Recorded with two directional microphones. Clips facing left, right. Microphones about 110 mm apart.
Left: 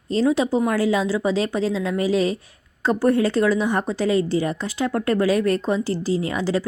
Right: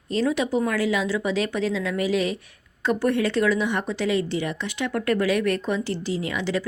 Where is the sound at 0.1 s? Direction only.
30° left (ahead or behind).